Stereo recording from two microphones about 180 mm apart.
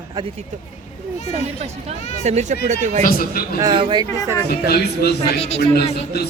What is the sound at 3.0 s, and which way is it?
Speech, 55° left (ahead or behind).